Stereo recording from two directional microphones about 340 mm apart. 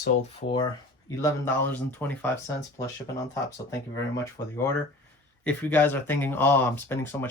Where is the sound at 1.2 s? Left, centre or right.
Centre.